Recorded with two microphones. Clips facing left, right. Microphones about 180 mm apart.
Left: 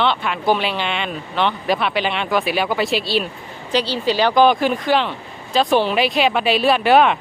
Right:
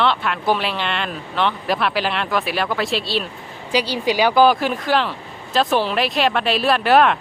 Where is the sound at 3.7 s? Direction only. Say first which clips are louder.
Even; 10° right (ahead or behind).